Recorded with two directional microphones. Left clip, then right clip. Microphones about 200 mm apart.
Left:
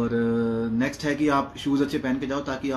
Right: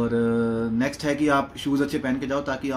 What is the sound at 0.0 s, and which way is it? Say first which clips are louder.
Speech: right 2 dB; 15° right (ahead or behind).